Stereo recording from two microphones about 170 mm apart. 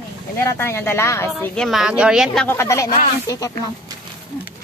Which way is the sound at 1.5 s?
Centre (ahead or behind).